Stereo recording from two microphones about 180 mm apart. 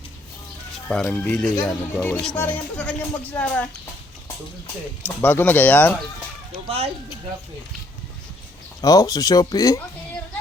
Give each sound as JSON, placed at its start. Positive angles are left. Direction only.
{"t": 0.9, "sound": "speech", "side_deg": 5}
{"t": 5.0, "sound": "speech", "side_deg": 10}
{"t": 6.7, "sound": "speech", "side_deg": -35}
{"t": 8.8, "sound": "speech", "side_deg": 20}